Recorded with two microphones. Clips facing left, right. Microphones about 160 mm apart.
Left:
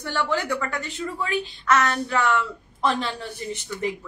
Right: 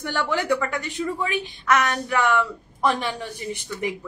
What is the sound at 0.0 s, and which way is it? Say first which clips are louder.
A woman's voice: even; 15° right (ahead or behind).